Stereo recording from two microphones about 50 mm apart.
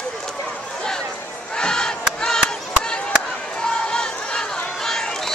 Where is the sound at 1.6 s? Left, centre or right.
Centre.